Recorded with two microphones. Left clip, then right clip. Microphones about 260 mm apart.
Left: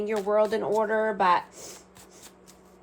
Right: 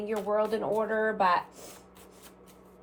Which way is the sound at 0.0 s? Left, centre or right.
Left.